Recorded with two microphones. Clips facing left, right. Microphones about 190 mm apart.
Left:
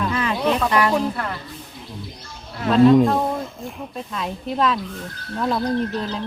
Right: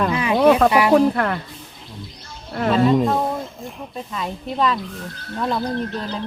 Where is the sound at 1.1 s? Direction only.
60° right (ahead or behind).